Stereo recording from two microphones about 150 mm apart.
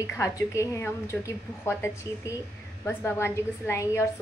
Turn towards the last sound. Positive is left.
turn(degrees=15)  # may be behind; listen again after turning